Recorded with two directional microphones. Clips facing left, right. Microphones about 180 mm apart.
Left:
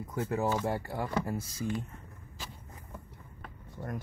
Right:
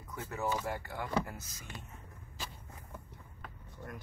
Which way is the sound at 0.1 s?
30° left (ahead or behind).